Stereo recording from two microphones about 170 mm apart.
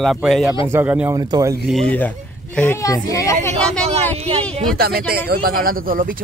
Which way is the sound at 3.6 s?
5° left (ahead or behind).